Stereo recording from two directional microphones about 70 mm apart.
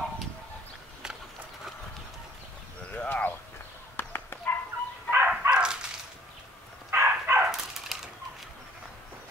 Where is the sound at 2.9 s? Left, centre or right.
Left.